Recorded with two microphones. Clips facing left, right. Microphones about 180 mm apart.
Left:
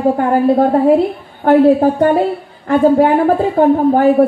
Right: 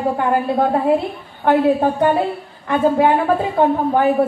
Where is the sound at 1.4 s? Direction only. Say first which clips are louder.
Left 6 dB; 45° left (ahead or behind).